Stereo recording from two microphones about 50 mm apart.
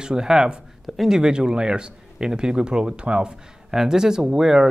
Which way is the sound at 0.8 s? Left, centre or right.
Centre.